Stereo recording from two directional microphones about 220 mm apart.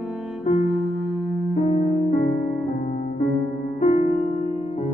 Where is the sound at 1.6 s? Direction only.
30° left (ahead or behind).